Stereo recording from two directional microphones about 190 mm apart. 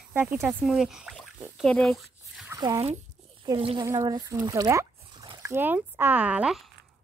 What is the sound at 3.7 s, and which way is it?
Speech, 15° right (ahead or behind).